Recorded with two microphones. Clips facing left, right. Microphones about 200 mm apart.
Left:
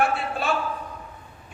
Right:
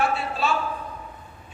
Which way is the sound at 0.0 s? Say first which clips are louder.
Even; 55° left (ahead or behind).